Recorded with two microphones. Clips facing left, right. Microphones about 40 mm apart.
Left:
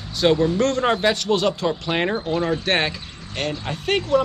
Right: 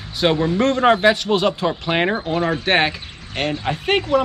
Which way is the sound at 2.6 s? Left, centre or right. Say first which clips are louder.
Right 4 dB; centre.